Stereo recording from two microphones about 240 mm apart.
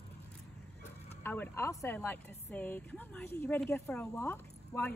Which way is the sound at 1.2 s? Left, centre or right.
Centre.